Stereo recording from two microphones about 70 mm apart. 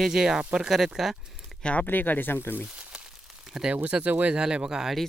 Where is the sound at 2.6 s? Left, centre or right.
Centre.